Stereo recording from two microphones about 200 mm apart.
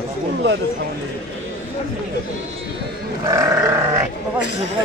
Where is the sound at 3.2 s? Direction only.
15° right (ahead or behind).